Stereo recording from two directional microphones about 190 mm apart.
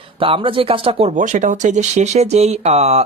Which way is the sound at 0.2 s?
30° right (ahead or behind).